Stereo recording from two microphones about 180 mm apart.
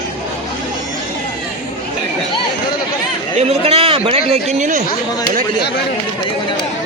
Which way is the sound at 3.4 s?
35° right (ahead or behind).